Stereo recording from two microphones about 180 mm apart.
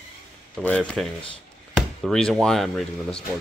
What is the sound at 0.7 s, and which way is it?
Speech, 5° left (ahead or behind).